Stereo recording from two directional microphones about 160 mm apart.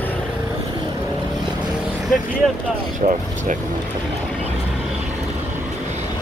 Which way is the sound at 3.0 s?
55° right (ahead or behind).